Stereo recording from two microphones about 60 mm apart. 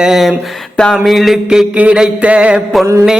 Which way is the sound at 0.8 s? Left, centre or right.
Centre.